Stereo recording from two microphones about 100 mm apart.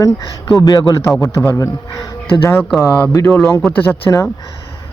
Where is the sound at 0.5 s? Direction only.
35° left (ahead or behind).